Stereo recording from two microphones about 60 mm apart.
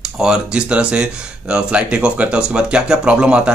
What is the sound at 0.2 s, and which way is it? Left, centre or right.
Speech, centre.